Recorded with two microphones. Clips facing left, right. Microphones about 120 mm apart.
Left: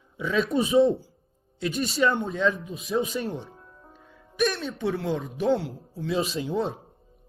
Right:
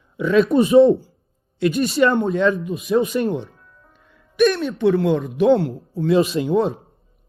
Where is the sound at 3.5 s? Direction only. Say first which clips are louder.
Left 2 dB; 25° left (ahead or behind).